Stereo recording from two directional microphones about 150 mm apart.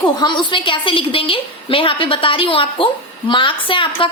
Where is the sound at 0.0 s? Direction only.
30° left (ahead or behind).